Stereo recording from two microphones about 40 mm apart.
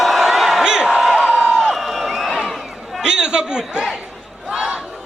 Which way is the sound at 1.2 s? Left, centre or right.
Right.